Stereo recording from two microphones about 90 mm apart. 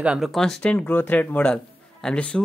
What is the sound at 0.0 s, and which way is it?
Speech, 10° right (ahead or behind).